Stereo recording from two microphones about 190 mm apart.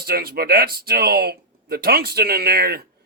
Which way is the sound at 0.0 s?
55° right (ahead or behind).